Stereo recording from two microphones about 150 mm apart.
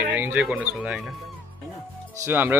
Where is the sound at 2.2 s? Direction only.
15° right (ahead or behind).